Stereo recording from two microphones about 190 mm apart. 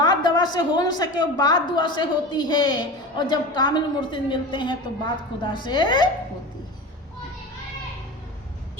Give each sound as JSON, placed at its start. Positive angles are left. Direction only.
{"t": 0.0, "sound": "a woman's voice", "side_deg": 25}